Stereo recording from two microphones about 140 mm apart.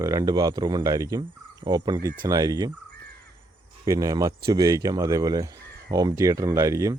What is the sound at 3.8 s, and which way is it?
Speech, 25° right (ahead or behind).